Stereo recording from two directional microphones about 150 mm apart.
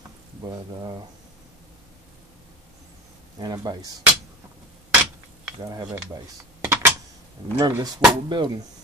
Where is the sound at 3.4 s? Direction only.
25° right (ahead or behind).